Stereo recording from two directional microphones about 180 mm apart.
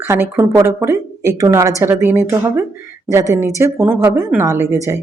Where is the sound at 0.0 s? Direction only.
15° right (ahead or behind).